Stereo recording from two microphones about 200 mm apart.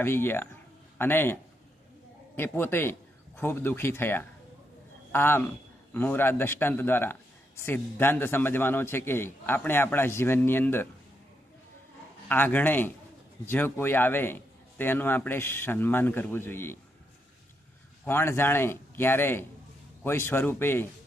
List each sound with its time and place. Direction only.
0.0 s a man's voice: 10° left (ahead or behind)
12.3 s a man's voice: 10° left (ahead or behind)
18.0 s a man's voice: 10° left (ahead or behind)